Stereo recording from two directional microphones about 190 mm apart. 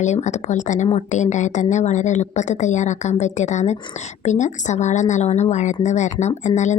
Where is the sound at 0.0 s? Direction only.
40° left (ahead or behind).